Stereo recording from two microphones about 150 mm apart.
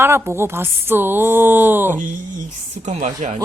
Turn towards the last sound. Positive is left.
turn(degrees=-55)  # may be behind; listen again after turning